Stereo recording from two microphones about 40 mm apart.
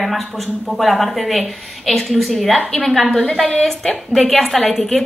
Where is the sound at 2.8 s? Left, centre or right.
Centre.